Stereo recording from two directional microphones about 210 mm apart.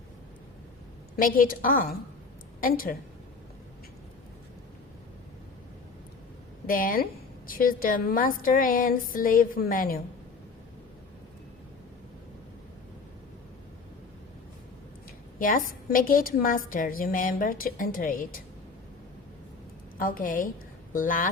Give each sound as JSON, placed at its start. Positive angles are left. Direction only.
{"t": 1.1, "sound": "a woman's voice", "side_deg": 45}
{"t": 6.7, "sound": "a woman's voice", "side_deg": 40}
{"t": 15.4, "sound": "a woman's voice", "side_deg": 40}
{"t": 20.0, "sound": "a woman's voice", "side_deg": 40}